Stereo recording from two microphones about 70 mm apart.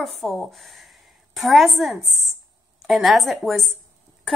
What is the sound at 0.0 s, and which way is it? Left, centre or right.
A woman's voice, centre.